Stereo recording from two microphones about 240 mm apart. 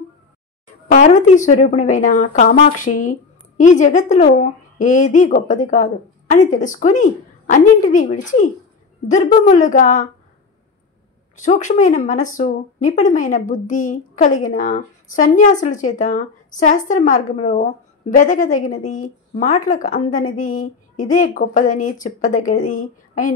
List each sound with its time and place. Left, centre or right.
0.8 s speech: left
11.3 s speech: left